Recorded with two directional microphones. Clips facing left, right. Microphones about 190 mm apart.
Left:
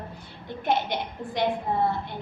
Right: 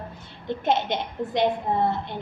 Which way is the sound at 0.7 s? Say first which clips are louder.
Right 1 dB; 20° right (ahead or behind).